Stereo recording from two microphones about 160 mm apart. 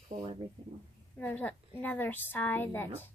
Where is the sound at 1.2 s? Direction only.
10° left (ahead or behind).